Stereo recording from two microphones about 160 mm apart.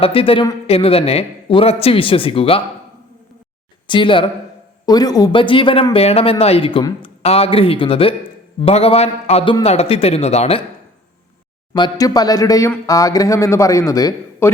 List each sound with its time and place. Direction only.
0.0 s a man's voice: 35° left (ahead or behind)
3.8 s a man's voice: 30° left (ahead or behind)
11.7 s a man's voice: 25° left (ahead or behind)